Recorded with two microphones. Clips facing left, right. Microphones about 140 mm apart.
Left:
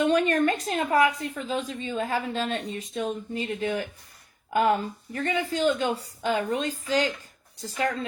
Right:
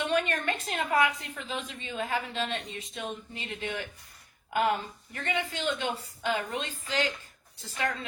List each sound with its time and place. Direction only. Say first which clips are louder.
0.0 s a woman's voice: left 7 dB; 40° left (ahead or behind)
5.1 s a woman's voice: left 5 dB; 35° left (ahead or behind)